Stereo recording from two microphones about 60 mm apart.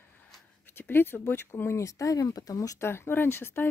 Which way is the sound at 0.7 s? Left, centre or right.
Left.